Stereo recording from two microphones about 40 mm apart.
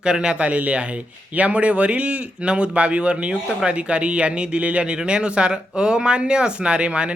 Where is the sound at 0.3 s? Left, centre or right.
Right.